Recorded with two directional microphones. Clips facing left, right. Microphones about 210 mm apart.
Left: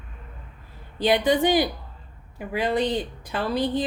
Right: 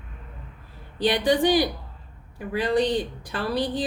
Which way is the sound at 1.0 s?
25° left (ahead or behind).